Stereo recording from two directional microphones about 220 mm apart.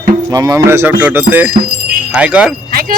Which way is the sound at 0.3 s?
15° right (ahead or behind).